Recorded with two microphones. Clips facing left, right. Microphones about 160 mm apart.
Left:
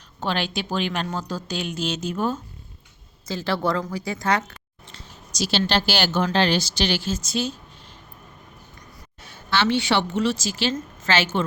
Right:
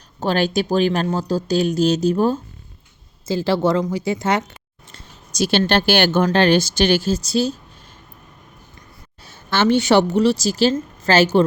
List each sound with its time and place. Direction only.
0.2 s speech: 40° right (ahead or behind); by 4.5 s 25° right (ahead or behind)
4.9 s speech: 55° right (ahead or behind); by 7.6 s 35° right (ahead or behind)
9.2 s a woman's voice: 45° right (ahead or behind)